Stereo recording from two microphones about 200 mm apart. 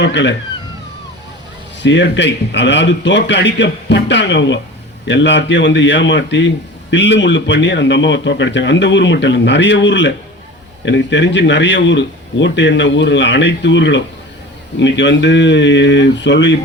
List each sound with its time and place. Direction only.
0.0 s speech: 65° left (ahead or behind)
1.8 s speech: 65° left (ahead or behind)